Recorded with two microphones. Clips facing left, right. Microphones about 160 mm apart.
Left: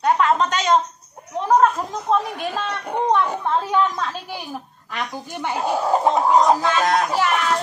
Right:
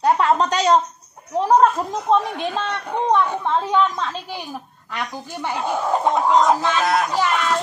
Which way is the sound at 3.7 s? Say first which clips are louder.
Right 1 dB; 10° left (ahead or behind).